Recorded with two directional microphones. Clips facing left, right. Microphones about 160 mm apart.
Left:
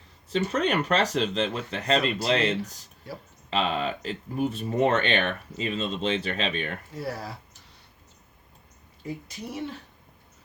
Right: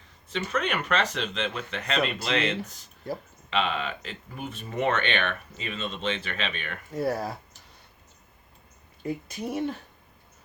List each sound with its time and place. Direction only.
0.3 s speech: 35° left (ahead or behind)
3.1 s a woman's voice: 45° right (ahead or behind)
3.5 s speech: 35° left (ahead or behind)
6.9 s a woman's voice: 50° right (ahead or behind)
9.0 s a woman's voice: 55° right (ahead or behind)